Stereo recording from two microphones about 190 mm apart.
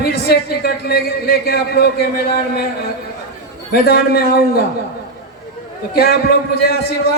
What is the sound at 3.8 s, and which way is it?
Speech, 55° left (ahead or behind).